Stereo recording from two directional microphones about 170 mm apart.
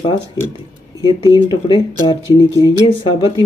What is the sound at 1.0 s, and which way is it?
Speech, 25° left (ahead or behind).